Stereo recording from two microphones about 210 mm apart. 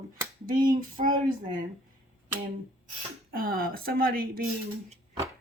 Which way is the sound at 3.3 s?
45° right (ahead or behind).